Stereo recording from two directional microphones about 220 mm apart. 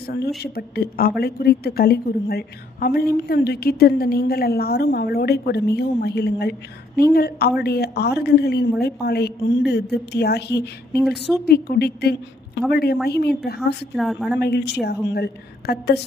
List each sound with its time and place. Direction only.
0.1 s a woman's voice: 45° left (ahead or behind)
13.9 s a woman's voice: centre (ahead or behind)
14.4 s a woman's voice: 50° left (ahead or behind)